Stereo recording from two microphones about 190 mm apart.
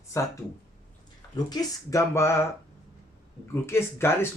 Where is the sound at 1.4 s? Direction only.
20° left (ahead or behind).